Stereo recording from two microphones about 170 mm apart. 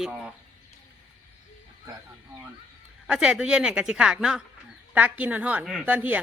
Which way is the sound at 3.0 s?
5° right (ahead or behind).